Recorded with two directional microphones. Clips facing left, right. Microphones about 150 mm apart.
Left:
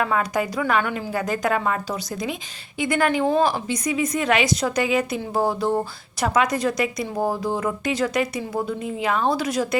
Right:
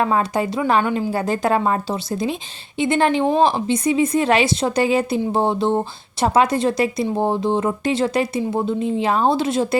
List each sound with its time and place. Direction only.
0.0 s a woman's voice: 30° right (ahead or behind)